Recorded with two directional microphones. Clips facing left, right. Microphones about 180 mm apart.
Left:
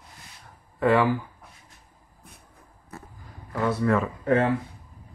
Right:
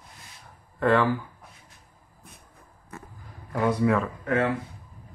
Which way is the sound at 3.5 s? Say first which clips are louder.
Right 1 dB; 15° right (ahead or behind).